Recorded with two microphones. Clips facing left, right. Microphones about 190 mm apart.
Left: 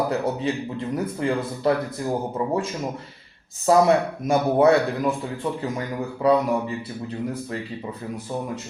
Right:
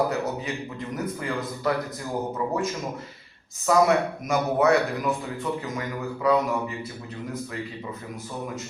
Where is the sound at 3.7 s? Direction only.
30° left (ahead or behind).